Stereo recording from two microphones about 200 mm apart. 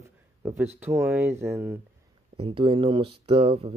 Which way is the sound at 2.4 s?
25° right (ahead or behind).